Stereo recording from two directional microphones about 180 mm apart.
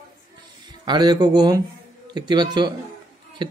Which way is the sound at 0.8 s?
25° right (ahead or behind).